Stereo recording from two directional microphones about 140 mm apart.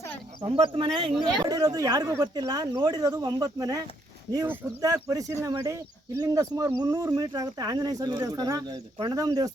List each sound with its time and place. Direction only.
0.4 s speech: 40° right (ahead or behind)
1.4 s speech: 25° right (ahead or behind)